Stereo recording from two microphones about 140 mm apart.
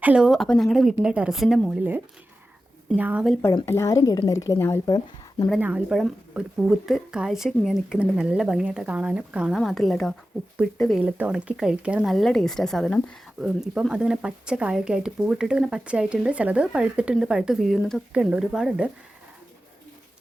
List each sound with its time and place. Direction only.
0.0 s a woman's voice: 5° right (ahead or behind)
1.7 s speech: 10° right (ahead or behind)
3.7 s a woman's voice: 20° left (ahead or behind)
5.5 s a woman's voice: 10° right (ahead or behind)
11.0 s speech: 10° right (ahead or behind)
12.1 s a woman's voice: 5° left (ahead or behind)